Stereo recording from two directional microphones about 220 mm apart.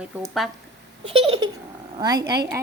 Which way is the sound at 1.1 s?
25° right (ahead or behind).